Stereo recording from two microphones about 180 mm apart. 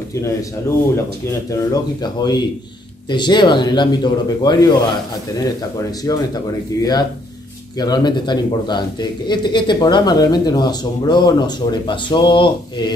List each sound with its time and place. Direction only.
0.1 s speech: 15° left (ahead or behind)
3.1 s speech: 25° left (ahead or behind)